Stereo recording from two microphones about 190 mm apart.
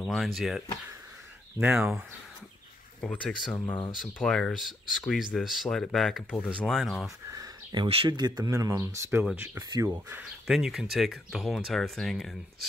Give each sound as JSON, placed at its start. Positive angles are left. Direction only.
{"t": 0.0, "sound": "speech", "side_deg": 0}
{"t": 3.0, "sound": "speech", "side_deg": 5}
{"t": 7.2, "sound": "speech", "side_deg": -20}
{"t": 10.4, "sound": "speech", "side_deg": 0}